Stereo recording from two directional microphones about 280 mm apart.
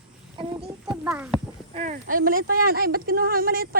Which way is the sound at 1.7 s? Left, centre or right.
Right.